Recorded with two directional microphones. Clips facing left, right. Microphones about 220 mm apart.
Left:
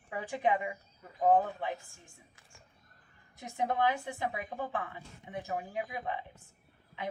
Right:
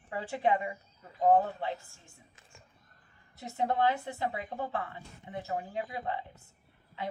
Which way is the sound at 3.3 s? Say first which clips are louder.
Right 2 dB; 15° left (ahead or behind).